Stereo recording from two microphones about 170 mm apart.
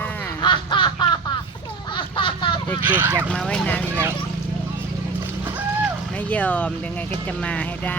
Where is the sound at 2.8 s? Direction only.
10° right (ahead or behind).